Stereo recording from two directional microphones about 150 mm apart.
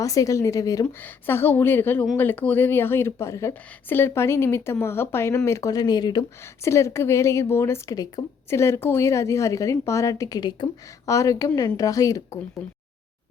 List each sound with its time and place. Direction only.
0.0 s a woman's voice: 20° left (ahead or behind)